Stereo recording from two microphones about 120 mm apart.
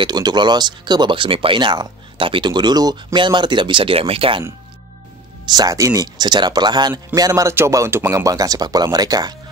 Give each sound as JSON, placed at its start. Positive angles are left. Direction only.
{"t": 0.0, "sound": "speech", "side_deg": -35}
{"t": 5.5, "sound": "speech", "side_deg": -30}